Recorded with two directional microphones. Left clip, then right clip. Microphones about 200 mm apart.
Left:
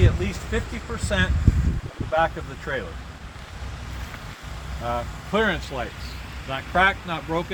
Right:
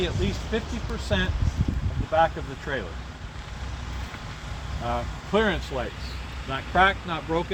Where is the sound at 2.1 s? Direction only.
30° left (ahead or behind).